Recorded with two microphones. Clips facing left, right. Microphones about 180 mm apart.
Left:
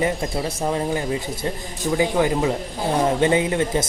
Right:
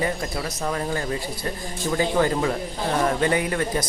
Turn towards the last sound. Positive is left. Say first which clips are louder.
# left 4 dB
turn(degrees=20)  # may be behind; listen again after turning